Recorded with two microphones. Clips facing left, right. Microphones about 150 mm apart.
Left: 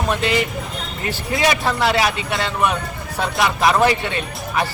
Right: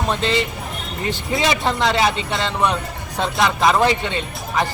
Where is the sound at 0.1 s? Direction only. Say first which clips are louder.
Left 1 dB; 25° right (ahead or behind).